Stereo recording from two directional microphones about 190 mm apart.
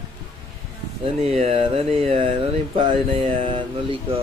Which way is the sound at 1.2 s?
30° right (ahead or behind).